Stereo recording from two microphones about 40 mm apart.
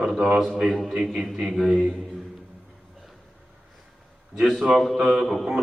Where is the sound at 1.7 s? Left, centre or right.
Centre.